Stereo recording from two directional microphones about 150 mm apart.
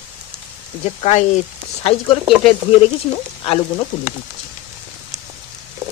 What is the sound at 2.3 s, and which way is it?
Speech, centre (ahead or behind).